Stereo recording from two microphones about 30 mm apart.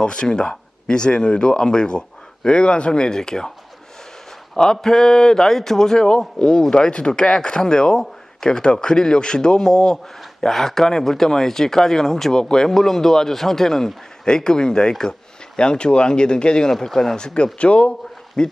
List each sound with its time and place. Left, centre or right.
0.0 s speech: left
4.5 s speech: left
6.4 s speech: left
10.5 s speech: centre
12.4 s speech: left
12.6 s speech: centre; by 16.7 s left
16.8 s speech: centre
17.2 s speech: left
18.4 s speech: left